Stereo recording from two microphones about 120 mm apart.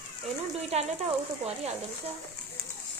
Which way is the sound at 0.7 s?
65° right (ahead or behind).